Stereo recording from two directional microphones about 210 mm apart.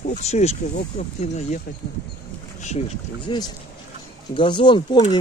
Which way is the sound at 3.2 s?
20° left (ahead or behind).